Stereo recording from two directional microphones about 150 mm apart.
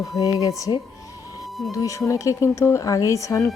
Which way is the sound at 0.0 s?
25° left (ahead or behind).